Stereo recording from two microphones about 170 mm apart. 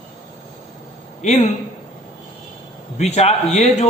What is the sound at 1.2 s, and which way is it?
Speech, 40° left (ahead or behind).